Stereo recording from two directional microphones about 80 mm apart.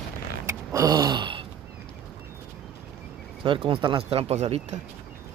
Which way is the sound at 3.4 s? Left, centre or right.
Right.